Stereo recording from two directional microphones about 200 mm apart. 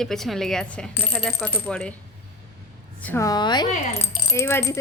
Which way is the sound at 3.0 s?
10° left (ahead or behind).